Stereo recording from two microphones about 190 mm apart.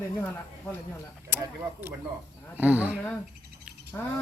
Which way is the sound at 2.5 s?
10° right (ahead or behind).